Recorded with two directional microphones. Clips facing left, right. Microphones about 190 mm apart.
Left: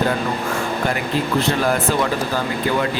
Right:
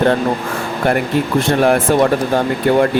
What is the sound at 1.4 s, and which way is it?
Speech, 55° right (ahead or behind).